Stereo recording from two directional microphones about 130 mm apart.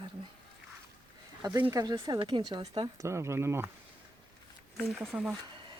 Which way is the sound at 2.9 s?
20° right (ahead or behind).